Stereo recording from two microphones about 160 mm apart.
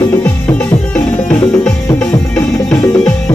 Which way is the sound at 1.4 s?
25° left (ahead or behind).